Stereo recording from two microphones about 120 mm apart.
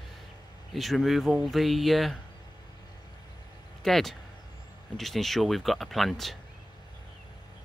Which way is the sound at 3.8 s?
Centre (ahead or behind).